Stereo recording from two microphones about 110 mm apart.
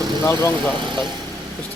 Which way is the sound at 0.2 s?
25° left (ahead or behind).